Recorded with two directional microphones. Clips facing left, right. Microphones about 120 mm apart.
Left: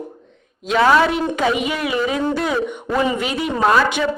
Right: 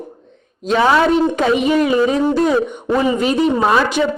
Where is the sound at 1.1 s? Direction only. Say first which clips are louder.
Right 5 dB; 30° right (ahead or behind).